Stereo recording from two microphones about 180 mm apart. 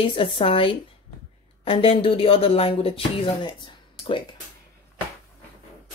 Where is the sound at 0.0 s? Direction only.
30° left (ahead or behind).